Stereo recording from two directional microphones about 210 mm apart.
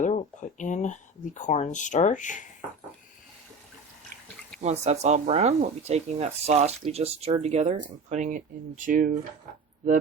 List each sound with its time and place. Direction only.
0.0 s speech: 35° left (ahead or behind)
4.6 s speech: 30° right (ahead or behind)